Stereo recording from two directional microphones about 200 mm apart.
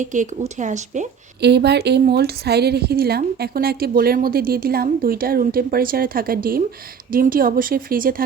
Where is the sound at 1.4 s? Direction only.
55° right (ahead or behind).